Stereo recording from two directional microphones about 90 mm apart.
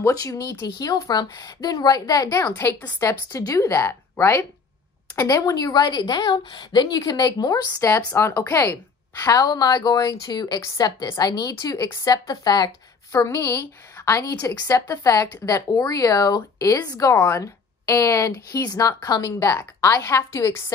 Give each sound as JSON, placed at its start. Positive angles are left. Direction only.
{"t": 0.0, "sound": "a woman's voice", "side_deg": 40}
{"t": 3.0, "sound": "a woman's voice", "side_deg": 35}
{"t": 9.2, "sound": "a woman's voice", "side_deg": 40}
{"t": 13.1, "sound": "speech", "side_deg": 30}